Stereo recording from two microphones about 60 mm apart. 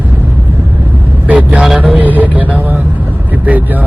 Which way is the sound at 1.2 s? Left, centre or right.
Right.